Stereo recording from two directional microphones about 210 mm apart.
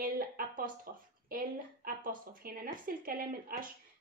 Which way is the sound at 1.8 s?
40° right (ahead or behind).